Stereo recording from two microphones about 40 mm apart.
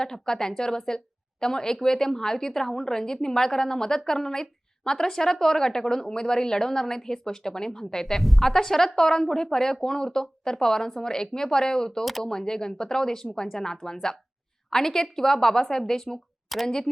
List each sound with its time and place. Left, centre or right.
0.0 s a woman's voice: centre
8.2 s a woman's voice: centre
8.4 s a woman's voice: centre
16.5 s a woman's voice: centre